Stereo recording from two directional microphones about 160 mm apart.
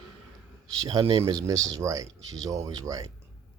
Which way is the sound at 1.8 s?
20° right (ahead or behind).